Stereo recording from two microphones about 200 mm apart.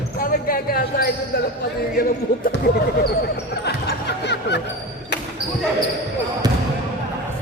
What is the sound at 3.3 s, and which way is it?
Music, 55° left (ahead or behind).